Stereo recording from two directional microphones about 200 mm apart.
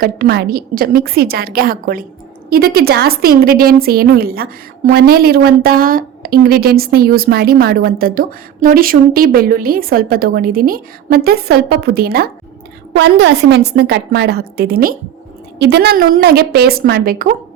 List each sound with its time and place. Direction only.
0.0 s a woman's voice: 50° right (ahead or behind)
12.9 s a woman's voice: 65° right (ahead or behind)